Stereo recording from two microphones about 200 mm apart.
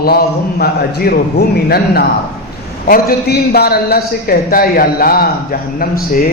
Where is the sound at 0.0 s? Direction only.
50° left (ahead or behind).